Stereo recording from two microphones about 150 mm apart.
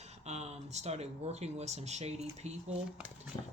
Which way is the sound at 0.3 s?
45° right (ahead or behind).